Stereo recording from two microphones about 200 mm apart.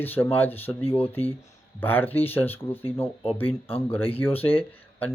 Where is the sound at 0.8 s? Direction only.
30° left (ahead or behind).